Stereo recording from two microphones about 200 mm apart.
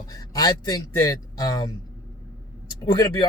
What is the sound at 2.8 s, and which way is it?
Speech, 20° left (ahead or behind).